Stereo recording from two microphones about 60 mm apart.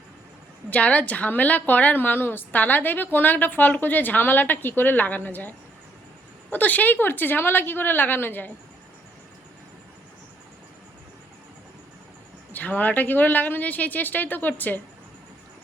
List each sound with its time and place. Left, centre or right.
0.7 s a woman's voice: left
12.5 s speech: left